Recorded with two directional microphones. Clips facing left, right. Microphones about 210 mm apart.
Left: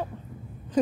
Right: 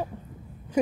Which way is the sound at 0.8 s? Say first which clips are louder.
Left 1 dB; 10° right (ahead or behind).